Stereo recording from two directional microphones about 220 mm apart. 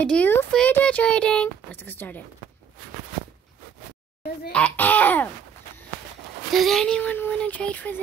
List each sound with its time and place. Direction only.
0.0 s speech: 5° left (ahead or behind)
4.5 s speech: 5° left (ahead or behind)
6.5 s speech: centre (ahead or behind)